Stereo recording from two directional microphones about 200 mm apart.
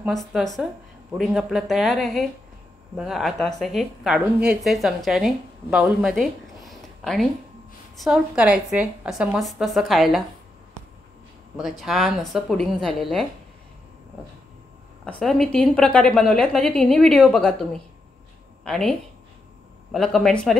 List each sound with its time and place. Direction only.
0.0 s a woman's voice: centre (ahead or behind)
8.0 s a woman's voice: 5° right (ahead or behind)
11.8 s a woman's voice: centre (ahead or behind)
15.0 s a woman's voice: 5° left (ahead or behind)